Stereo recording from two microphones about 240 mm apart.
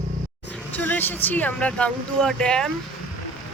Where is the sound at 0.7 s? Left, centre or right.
Centre.